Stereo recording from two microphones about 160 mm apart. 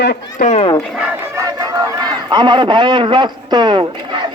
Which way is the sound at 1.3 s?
25° right (ahead or behind).